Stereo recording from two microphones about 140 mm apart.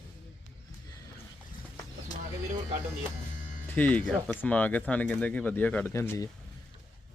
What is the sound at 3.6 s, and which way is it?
Speech, 10° left (ahead or behind).